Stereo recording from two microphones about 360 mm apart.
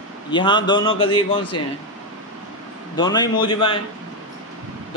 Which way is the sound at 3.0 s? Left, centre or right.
Centre.